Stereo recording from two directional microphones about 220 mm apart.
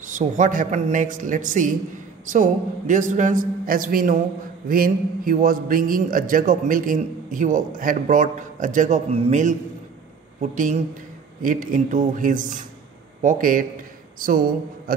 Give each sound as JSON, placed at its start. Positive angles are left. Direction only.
{"t": 0.0, "sound": "a man's voice", "side_deg": -35}